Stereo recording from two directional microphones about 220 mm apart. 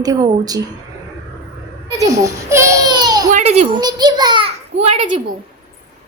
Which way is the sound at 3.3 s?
30° right (ahead or behind).